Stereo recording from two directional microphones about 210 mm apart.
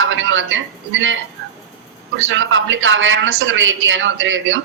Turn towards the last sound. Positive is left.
turn(degrees=-65)  # may be behind; listen again after turning